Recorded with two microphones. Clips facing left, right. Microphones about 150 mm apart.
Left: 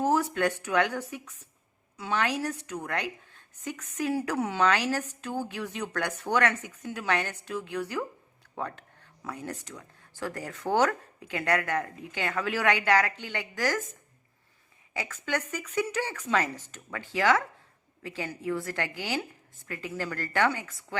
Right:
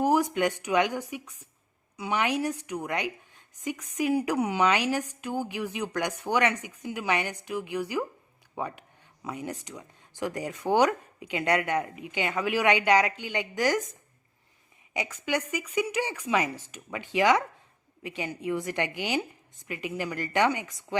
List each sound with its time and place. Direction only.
0.0 s a woman's voice: 15° right (ahead or behind)
14.9 s a woman's voice: 15° right (ahead or behind)